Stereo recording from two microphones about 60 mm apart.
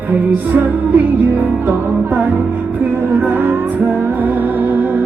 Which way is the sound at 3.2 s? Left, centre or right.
Right.